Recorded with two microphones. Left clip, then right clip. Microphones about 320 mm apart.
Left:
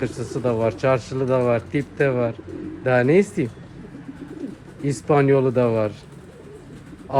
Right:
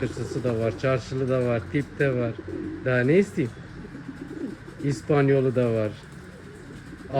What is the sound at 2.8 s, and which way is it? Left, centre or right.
Speech, centre.